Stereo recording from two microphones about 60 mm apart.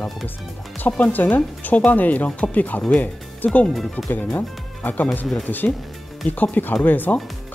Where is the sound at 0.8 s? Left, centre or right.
Left.